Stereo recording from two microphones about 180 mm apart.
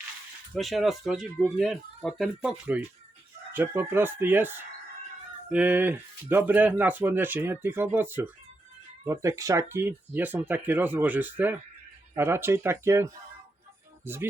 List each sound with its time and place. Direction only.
0.5 s speech: centre (ahead or behind)